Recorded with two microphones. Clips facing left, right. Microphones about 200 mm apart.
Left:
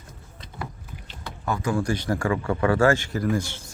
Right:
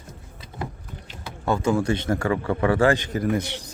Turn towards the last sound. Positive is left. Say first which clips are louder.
# right 1 dB
turn(degrees=-20)  # may be behind; listen again after turning